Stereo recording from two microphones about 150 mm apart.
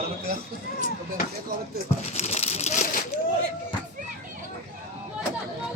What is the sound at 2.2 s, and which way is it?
Crumpling, 45° left (ahead or behind).